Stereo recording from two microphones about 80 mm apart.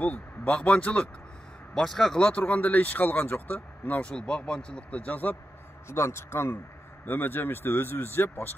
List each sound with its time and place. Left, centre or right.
0.0 s speech: centre
2.2 s speech: centre
5.9 s a man's voice: left